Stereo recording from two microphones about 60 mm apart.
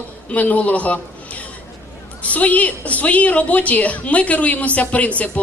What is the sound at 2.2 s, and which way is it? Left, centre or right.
A woman's voice, left.